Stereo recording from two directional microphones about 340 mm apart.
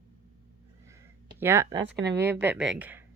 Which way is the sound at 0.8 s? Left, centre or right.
Centre.